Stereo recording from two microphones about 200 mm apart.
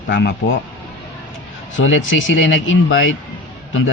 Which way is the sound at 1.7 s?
70° left (ahead or behind).